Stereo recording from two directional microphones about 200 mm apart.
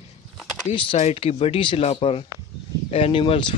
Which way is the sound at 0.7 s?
30° left (ahead or behind).